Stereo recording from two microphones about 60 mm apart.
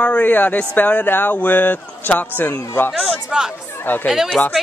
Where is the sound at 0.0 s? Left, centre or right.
Left.